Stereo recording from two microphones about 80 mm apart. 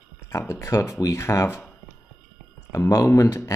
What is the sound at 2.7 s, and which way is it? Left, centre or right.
Speech, left.